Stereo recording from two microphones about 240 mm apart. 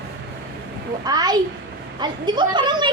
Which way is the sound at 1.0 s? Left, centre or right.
Centre.